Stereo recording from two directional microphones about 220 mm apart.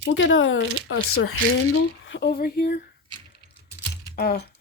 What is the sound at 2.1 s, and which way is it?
Speech, 45° left (ahead or behind).